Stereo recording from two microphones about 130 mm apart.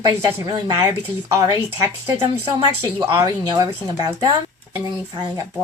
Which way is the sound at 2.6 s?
40° right (ahead or behind).